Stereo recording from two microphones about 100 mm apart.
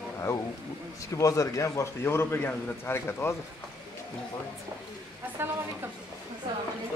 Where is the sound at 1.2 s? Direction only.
30° left (ahead or behind).